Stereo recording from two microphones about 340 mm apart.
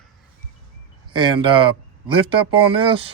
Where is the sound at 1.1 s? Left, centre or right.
Centre.